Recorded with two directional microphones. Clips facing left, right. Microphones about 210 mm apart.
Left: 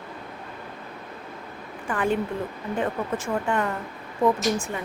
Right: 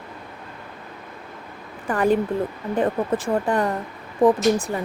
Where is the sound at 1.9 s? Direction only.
40° right (ahead or behind).